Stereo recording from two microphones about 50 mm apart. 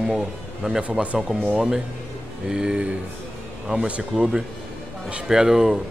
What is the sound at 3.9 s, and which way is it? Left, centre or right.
A man's voice, centre.